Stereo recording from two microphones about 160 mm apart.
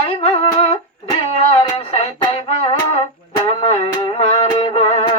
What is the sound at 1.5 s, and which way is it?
Music, 35° left (ahead or behind).